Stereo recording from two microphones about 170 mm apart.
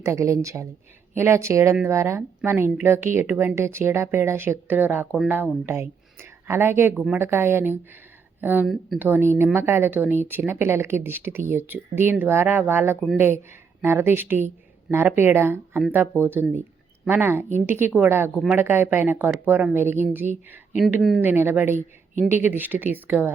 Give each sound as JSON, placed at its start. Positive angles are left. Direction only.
{"t": 0.0, "sound": "a woman's voice", "side_deg": -15}
{"t": 8.6, "sound": "speech", "side_deg": 0}
{"t": 9.0, "sound": "a woman's voice", "side_deg": -10}
{"t": 21.2, "sound": "a woman's voice", "side_deg": -10}